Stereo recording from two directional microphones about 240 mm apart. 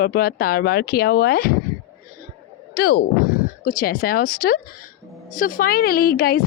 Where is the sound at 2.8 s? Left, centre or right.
Left.